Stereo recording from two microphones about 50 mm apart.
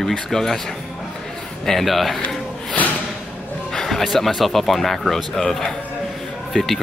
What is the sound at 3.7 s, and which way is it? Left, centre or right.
Speech, centre.